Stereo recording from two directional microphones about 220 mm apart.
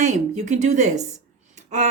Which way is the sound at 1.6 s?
30° right (ahead or behind).